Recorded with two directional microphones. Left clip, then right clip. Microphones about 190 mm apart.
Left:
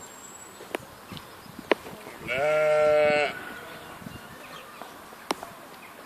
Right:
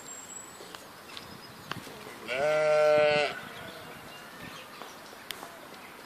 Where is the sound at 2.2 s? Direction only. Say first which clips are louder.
Left 3 dB; 10° left (ahead or behind).